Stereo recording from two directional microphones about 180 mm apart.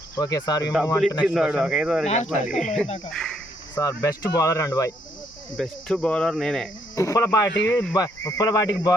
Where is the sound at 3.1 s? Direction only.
5° left (ahead or behind).